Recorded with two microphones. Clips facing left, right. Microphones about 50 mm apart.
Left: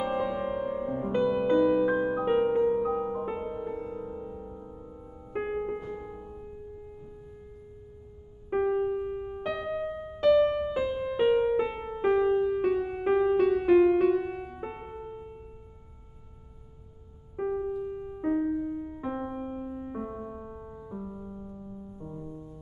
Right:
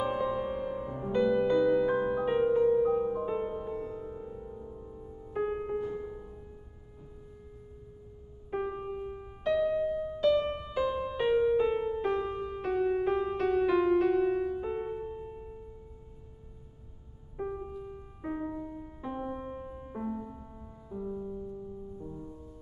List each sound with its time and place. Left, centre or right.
0.0 s music: centre
5.3 s music: left
8.5 s music: centre
11.0 s music: centre
11.4 s piano: left
11.8 s music: left
12.4 s music: centre
17.6 s keyboard: centre
17.9 s music: left
18.3 s music: centre
18.7 s music: centre